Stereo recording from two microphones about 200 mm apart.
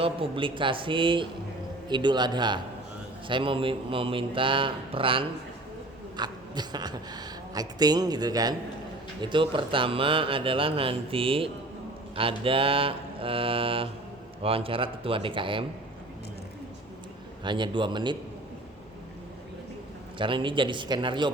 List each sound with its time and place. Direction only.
0.0 s a woman's voice: 25° right (ahead or behind)
17.4 s a woman's voice: 25° right (ahead or behind)
20.1 s a woman's voice: 25° right (ahead or behind)